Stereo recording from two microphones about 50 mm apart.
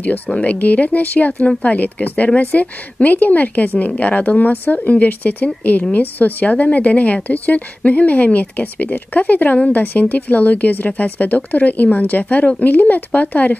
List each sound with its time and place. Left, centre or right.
0.4 s a woman's voice: left